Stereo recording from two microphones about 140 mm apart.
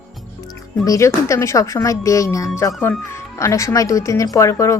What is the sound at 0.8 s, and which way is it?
A woman's voice, 25° left (ahead or behind).